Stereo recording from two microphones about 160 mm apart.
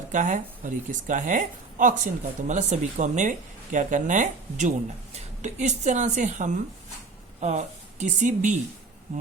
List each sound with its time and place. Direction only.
0.1 s speech: 50° right (ahead or behind)